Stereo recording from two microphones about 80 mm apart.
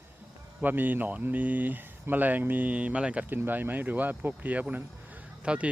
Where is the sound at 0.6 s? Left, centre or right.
Right.